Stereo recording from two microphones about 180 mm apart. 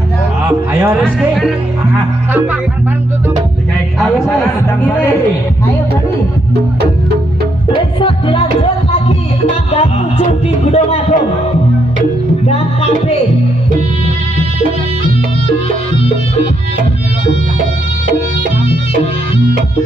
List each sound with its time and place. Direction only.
1.0 s speech: centre (ahead or behind)
7.7 s music: 30° left (ahead or behind)
9.7 s music: 35° left (ahead or behind)
10.7 s speech: 35° left (ahead or behind)